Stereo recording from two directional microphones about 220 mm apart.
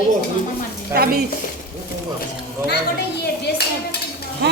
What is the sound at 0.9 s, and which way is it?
Speech, 45° right (ahead or behind).